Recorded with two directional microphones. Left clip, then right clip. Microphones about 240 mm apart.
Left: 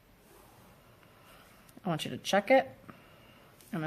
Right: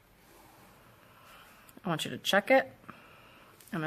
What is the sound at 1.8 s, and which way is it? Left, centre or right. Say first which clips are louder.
Speech: right 2 dB; centre.